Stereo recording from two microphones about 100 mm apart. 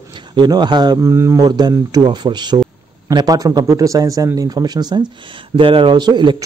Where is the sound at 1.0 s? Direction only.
30° right (ahead or behind); by 5.1 s 45° right (ahead or behind).